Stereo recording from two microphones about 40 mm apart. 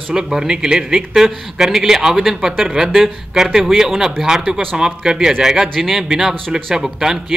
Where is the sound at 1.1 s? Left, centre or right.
Centre.